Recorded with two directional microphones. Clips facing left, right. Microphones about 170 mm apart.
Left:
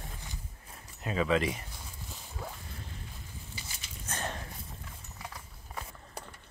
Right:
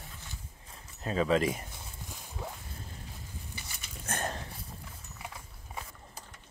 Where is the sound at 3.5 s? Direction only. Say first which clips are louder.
Even; 55° right (ahead or behind).